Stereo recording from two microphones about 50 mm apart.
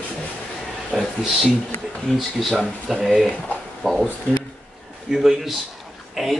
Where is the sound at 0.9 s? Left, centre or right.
Centre.